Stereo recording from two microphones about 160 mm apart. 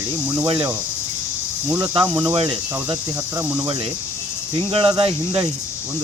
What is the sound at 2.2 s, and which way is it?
Cricket, 30° right (ahead or behind).